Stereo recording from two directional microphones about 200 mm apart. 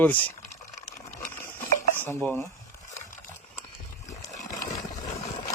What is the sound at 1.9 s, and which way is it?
Dishes, 10° left (ahead or behind).